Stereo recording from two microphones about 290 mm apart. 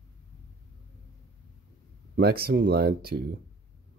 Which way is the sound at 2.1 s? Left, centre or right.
Right.